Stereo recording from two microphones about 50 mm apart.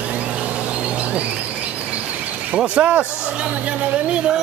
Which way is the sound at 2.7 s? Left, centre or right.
Right.